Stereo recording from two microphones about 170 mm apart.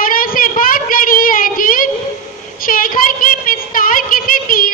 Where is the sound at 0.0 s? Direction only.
55° left (ahead or behind).